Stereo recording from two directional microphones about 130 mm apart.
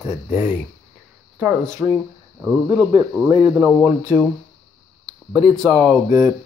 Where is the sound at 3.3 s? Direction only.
40° right (ahead or behind).